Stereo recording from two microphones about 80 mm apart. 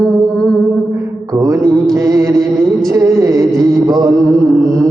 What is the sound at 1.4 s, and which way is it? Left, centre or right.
Music, right.